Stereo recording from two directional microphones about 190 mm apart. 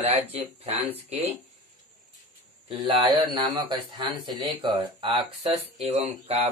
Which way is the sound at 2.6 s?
30° right (ahead or behind).